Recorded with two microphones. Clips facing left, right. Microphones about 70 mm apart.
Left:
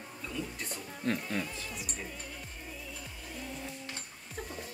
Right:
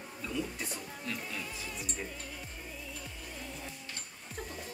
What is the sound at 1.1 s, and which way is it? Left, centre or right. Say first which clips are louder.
Speech: left 8 dB; left.